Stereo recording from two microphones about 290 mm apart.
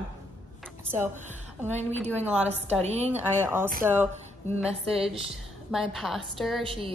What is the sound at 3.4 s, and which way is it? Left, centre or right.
Speech, centre.